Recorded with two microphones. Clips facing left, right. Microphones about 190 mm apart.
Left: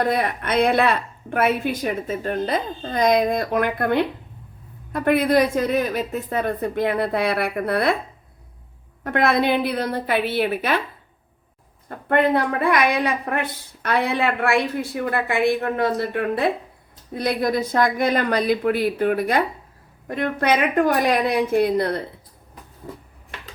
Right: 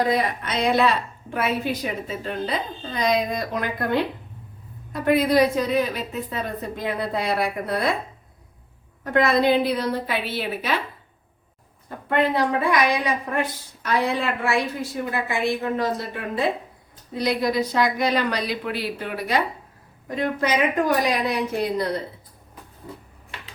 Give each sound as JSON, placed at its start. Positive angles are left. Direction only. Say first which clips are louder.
{"t": 0.1, "sound": "a woman's voice", "louder": "left 2 dB", "side_deg": 60}
{"t": 4.9, "sound": "a woman's voice", "louder": "left 1 dB", "side_deg": 55}
{"t": 9.0, "sound": "a woman's voice", "louder": "even", "side_deg": 60}
{"t": 11.9, "sound": "a woman's voice", "louder": "left 3 dB", "side_deg": 55}